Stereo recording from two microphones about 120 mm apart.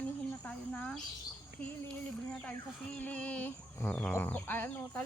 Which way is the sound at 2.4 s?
10° left (ahead or behind).